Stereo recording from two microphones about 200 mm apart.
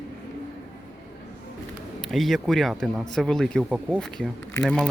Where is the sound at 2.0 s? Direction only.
Centre (ahead or behind).